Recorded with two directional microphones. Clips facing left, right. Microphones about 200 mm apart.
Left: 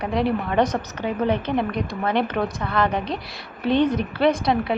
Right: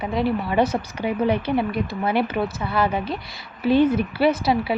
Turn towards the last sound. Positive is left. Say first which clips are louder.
# even
turn(degrees=-5)  # may be behind; listen again after turning